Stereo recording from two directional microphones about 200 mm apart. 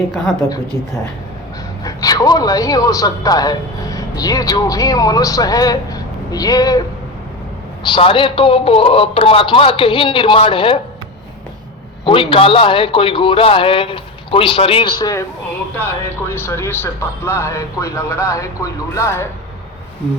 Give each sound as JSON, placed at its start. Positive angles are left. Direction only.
{"t": 1.8, "sound": "speech", "side_deg": 15}
{"t": 7.9, "sound": "a man's voice", "side_deg": 25}
{"t": 12.0, "sound": "a man's voice", "side_deg": 25}